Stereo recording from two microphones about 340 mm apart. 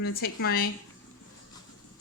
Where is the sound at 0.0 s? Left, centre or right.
Left.